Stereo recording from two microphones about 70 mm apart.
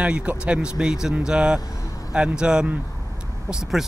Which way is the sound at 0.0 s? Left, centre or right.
Centre.